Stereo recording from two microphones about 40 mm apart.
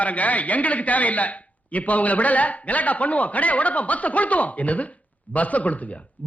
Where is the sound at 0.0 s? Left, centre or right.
Left.